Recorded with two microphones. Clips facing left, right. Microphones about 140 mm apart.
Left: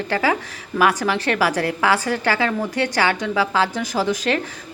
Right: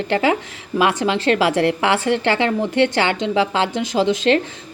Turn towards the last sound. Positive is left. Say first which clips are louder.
# right 4 dB
turn(degrees=-20)  # may be behind; listen again after turning